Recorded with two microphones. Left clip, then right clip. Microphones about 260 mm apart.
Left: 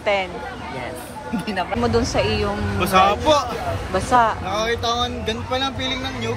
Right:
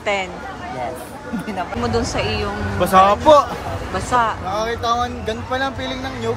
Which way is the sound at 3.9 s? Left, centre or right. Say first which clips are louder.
Left 1 dB; centre.